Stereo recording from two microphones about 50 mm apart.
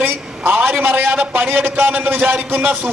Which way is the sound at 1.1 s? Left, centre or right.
Right.